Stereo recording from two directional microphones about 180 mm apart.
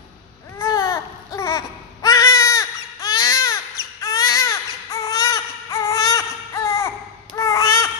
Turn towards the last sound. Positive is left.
turn(degrees=15)  # may be behind; listen again after turning